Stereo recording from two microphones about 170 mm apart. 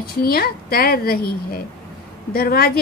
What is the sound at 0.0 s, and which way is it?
A woman's voice, 65° left (ahead or behind).